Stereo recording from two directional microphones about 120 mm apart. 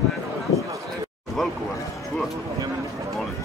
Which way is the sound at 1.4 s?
Centre (ahead or behind).